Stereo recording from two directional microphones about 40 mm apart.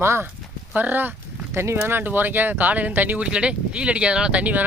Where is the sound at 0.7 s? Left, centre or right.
Right.